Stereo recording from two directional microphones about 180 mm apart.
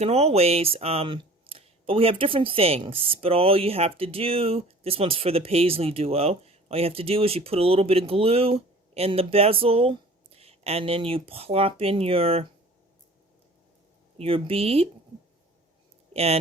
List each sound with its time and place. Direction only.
0.0 s speech: 35° right (ahead or behind)
14.2 s speech: 30° right (ahead or behind)
16.1 s speech: 35° right (ahead or behind)